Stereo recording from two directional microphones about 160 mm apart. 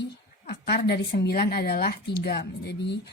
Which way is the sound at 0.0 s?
90° left.